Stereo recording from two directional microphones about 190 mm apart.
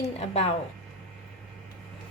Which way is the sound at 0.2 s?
35° left (ahead or behind).